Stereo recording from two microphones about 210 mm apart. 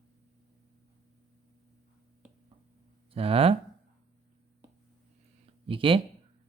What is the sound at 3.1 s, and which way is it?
Speech, 25° right (ahead or behind).